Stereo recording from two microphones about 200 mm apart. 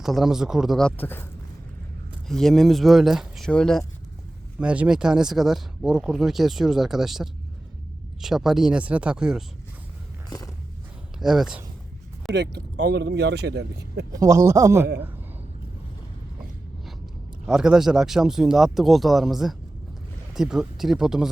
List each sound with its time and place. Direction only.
0.0 s speech: centre (ahead or behind)
10.2 s a sound: 20° left (ahead or behind)
11.2 s speech: centre (ahead or behind)
12.3 s speech: 55° right (ahead or behind)
14.1 s a man's voice: 15° right (ahead or behind)
17.4 s speech: 5° right (ahead or behind)